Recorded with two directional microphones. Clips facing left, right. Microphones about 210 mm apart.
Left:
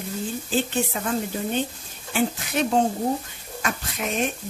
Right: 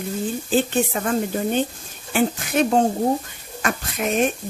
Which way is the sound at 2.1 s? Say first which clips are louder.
Right 3 dB; 50° right (ahead or behind).